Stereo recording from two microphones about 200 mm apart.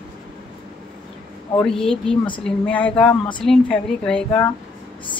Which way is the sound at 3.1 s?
25° left (ahead or behind).